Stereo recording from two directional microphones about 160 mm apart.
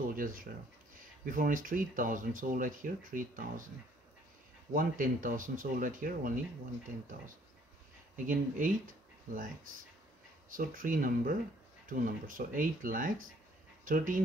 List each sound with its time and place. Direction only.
0.0 s speech: 60° right (ahead or behind)
4.7 s speech: 60° right (ahead or behind)
8.3 s speech: 55° right (ahead or behind)
10.5 s speech: 60° right (ahead or behind)